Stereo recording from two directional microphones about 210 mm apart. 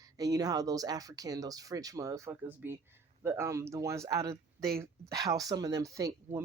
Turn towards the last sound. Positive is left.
turn(degrees=-15)  # may be behind; listen again after turning